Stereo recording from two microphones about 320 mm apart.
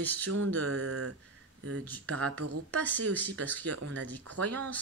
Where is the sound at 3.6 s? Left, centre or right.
Right.